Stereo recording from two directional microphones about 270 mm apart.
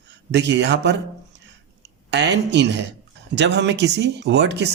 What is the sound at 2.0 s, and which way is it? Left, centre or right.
Speech, right.